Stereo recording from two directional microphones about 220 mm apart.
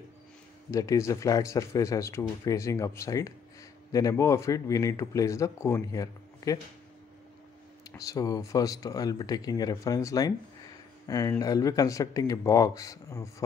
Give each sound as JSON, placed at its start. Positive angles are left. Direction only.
{"t": 0.7, "sound": "speech", "side_deg": 15}
{"t": 7.9, "sound": "speech", "side_deg": 15}